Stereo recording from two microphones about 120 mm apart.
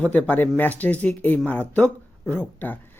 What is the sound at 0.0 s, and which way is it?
Speech, 10° left (ahead or behind).